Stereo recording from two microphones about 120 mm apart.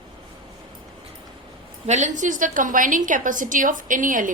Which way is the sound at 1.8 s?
85° right.